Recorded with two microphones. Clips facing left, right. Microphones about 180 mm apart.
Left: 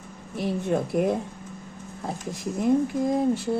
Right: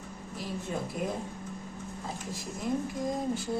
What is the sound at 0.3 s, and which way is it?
Speech, 65° left (ahead or behind).